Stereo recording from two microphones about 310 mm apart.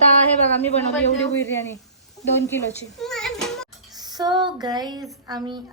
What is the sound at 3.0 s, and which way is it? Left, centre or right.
Music, centre.